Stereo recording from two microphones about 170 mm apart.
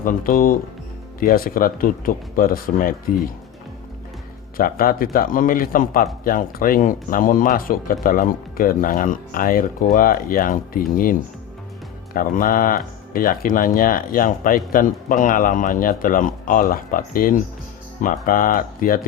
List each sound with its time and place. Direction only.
0.0 s speech: 55° left (ahead or behind)
4.5 s speech: 60° left (ahead or behind)